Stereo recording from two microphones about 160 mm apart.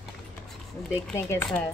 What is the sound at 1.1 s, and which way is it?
Speech, 15° left (ahead or behind).